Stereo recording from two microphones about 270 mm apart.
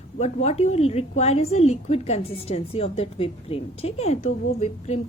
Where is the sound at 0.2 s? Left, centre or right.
Left.